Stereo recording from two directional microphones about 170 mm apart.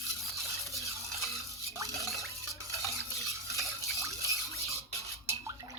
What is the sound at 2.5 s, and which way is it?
Stir, 20° right (ahead or behind).